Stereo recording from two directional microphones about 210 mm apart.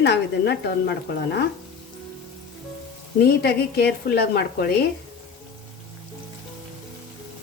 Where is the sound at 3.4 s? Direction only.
50° left (ahead or behind).